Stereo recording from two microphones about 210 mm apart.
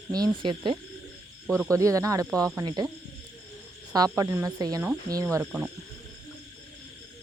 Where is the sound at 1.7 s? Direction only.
15° right (ahead or behind).